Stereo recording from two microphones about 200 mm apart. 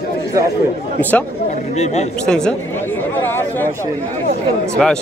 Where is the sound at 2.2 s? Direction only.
5° left (ahead or behind).